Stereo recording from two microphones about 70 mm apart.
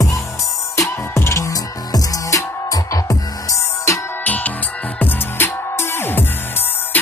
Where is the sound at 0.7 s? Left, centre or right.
Left.